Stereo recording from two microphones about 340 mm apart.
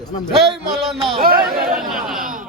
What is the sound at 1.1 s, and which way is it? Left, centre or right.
Speech, right.